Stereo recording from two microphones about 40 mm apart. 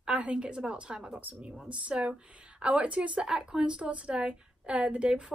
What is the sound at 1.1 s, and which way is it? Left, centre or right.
Speech, right.